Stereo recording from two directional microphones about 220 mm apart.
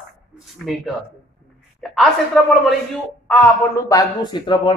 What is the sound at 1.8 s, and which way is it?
A man's voice, centre (ahead or behind).